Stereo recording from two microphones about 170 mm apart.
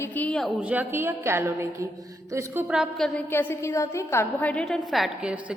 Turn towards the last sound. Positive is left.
turn(degrees=-5)  # may be behind; listen again after turning